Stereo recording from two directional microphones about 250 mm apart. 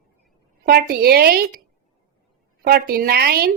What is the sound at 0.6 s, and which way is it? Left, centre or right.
Speech, right.